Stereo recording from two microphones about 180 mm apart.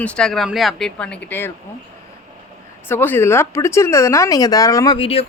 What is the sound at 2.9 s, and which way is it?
Speech, 10° left (ahead or behind).